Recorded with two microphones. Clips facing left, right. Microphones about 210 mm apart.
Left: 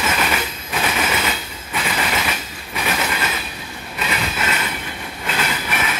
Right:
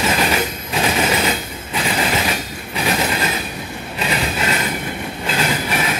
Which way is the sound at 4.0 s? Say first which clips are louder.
Right 3 dB; 35° right (ahead or behind).